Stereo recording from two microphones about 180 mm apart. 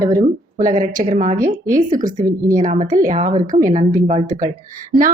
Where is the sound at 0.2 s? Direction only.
45° right (ahead or behind).